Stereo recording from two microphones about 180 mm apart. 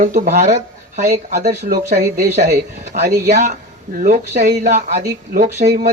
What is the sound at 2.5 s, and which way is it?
Speech, 65° right (ahead or behind).